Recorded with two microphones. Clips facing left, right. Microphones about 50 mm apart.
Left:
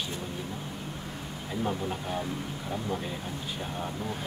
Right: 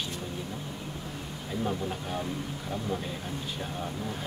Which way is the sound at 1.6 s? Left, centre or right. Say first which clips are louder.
Left 1 dB; centre.